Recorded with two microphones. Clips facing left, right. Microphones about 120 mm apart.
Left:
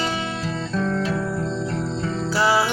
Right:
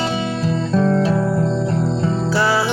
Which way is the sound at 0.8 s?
35° right (ahead or behind).